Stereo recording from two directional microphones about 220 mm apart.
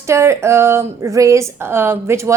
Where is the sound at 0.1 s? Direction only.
10° right (ahead or behind).